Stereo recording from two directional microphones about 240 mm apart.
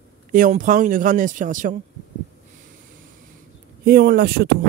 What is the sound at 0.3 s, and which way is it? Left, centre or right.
Speech, right.